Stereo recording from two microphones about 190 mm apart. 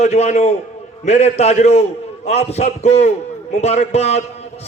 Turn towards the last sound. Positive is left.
turn(degrees=35)  # may be behind; listen again after turning